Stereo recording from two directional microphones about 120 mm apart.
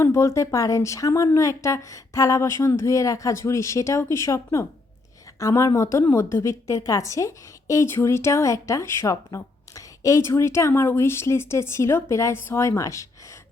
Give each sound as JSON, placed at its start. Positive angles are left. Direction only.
{"t": 0.0, "sound": "a woman's voice", "side_deg": 25}